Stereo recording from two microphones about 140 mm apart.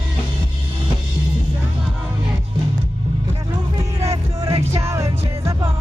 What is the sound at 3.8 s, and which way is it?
Music, 25° right (ahead or behind).